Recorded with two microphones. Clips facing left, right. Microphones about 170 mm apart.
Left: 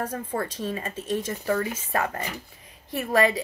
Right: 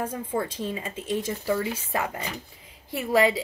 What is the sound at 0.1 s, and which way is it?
Speech, 10° right (ahead or behind).